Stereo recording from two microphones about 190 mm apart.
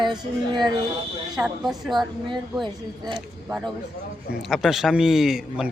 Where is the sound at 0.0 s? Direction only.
25° right (ahead or behind).